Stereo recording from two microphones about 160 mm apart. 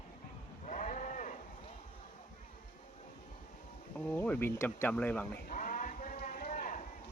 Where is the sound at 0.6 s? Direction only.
50° left (ahead or behind).